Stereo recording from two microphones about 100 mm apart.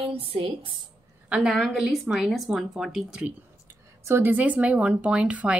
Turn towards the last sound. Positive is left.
turn(degrees=-10)  # may be behind; listen again after turning